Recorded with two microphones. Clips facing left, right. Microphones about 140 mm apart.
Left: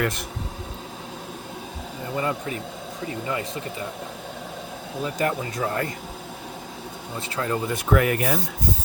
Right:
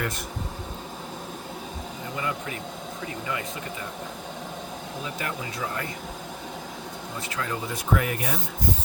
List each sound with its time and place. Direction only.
2.1 s speech: 35° left (ahead or behind)
5.0 s speech: 40° left (ahead or behind)
7.2 s speech: 35° left (ahead or behind)
7.7 s speech: 65° left (ahead or behind)